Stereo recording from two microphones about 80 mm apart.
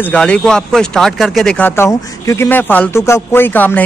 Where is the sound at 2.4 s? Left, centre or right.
Left.